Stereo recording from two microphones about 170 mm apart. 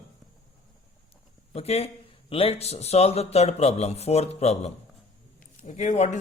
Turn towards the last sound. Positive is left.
turn(degrees=45)  # may be behind; listen again after turning